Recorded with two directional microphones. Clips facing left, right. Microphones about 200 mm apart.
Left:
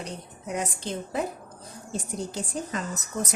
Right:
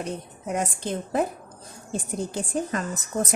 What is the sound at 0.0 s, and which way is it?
A woman's voice, 50° right (ahead or behind).